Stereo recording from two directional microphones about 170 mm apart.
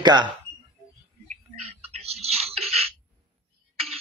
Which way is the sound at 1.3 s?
40° right (ahead or behind).